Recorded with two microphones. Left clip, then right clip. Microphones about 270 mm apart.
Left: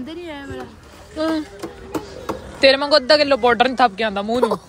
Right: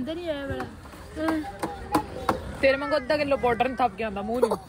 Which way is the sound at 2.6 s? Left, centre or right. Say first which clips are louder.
Left 9 dB; left.